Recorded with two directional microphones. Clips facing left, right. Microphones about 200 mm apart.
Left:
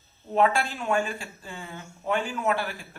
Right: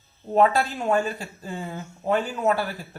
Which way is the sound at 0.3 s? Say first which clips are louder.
Right 3 dB; 40° right (ahead or behind).